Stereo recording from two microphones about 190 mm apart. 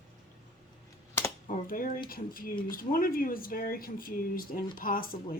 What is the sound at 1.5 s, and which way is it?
Speech, 50° left (ahead or behind).